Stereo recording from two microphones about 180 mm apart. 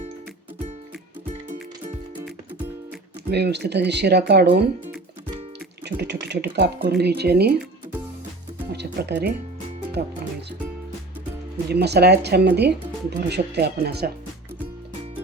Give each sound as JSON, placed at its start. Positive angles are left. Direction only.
{"t": 3.2, "sound": "speech", "side_deg": -65}
{"t": 5.8, "sound": "speech", "side_deg": -70}
{"t": 8.7, "sound": "speech", "side_deg": -70}
{"t": 11.7, "sound": "speech", "side_deg": -65}